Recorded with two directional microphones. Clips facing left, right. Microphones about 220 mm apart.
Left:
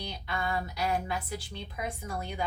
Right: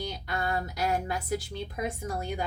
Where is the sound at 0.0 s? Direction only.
45° right (ahead or behind).